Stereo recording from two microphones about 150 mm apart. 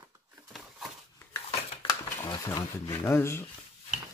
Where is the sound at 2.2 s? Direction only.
25° left (ahead or behind).